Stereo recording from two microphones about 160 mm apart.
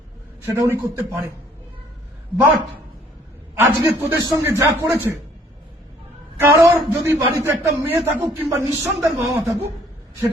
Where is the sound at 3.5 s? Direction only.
15° right (ahead or behind).